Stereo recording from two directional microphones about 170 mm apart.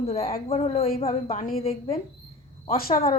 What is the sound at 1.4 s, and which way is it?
Speech, 60° left (ahead or behind).